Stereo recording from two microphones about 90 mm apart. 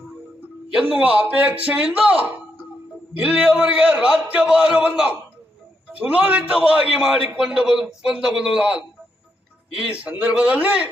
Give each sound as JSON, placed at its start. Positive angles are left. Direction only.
{"t": 0.7, "sound": "a man's voice", "side_deg": -10}